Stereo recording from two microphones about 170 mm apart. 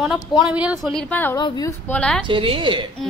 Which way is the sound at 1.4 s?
25° left (ahead or behind).